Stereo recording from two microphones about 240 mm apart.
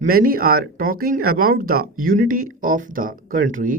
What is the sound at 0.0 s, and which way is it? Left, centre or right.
Speech, right.